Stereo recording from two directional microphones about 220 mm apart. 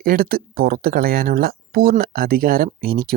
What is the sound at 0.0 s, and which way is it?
Speech, 40° right (ahead or behind).